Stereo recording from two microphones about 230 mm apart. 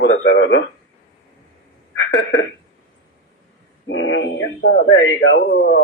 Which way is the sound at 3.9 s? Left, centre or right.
Left.